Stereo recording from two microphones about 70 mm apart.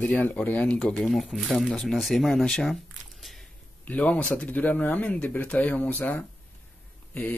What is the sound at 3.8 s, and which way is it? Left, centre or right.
A man's voice, left.